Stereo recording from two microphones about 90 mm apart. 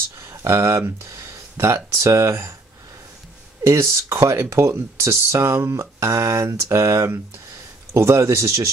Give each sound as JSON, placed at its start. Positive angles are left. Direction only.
{"t": 0.2, "sound": "speech", "side_deg": -30}
{"t": 3.6, "sound": "speech", "side_deg": -30}